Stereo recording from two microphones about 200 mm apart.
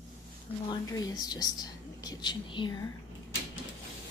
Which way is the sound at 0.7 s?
20° left (ahead or behind).